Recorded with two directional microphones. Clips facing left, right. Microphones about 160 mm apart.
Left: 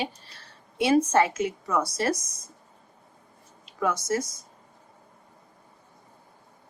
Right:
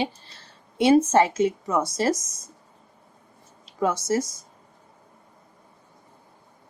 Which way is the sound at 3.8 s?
25° right (ahead or behind).